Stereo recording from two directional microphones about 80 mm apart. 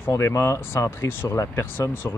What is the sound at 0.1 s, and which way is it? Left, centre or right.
Speech, left.